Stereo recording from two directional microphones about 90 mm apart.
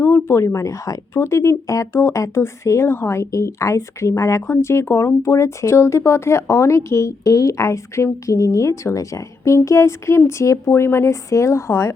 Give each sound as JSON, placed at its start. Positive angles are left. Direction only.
{"t": 0.0, "sound": "speech", "side_deg": 30}